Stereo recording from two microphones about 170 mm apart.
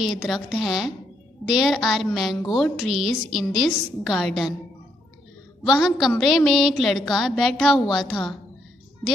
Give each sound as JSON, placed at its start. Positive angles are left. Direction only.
{"t": 0.0, "sound": "a woman's voice", "side_deg": 0}
{"t": 5.7, "sound": "a woman's voice", "side_deg": 0}